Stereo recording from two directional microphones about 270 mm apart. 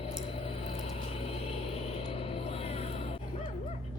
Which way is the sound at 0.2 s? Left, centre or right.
Left.